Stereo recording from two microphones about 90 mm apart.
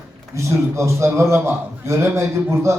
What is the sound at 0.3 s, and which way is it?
A man's voice, 35° right (ahead or behind).